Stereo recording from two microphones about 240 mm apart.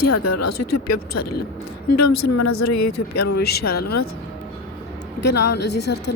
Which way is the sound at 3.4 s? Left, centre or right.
Left.